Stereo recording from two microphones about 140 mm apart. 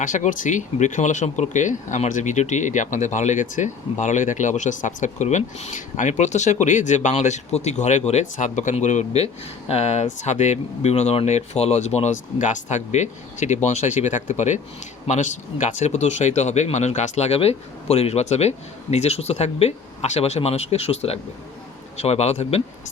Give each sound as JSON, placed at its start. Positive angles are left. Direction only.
{"t": 0.0, "sound": "speech", "side_deg": 65}